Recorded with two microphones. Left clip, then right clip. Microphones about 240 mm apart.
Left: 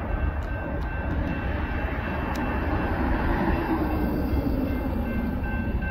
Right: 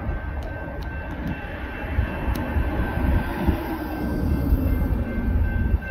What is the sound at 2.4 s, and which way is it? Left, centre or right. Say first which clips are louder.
Vehicle: left 1 dB; centre.